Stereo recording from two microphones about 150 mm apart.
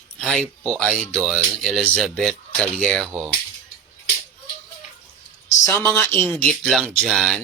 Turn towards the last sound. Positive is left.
turn(degrees=0)  # may be behind; listen again after turning